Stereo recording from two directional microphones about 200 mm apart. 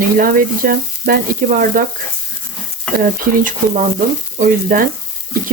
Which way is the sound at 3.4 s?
40° right (ahead or behind).